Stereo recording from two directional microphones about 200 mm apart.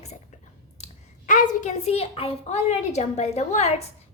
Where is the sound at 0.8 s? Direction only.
40° left (ahead or behind).